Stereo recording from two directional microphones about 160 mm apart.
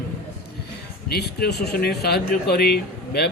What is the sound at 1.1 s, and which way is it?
Speech, 85° left.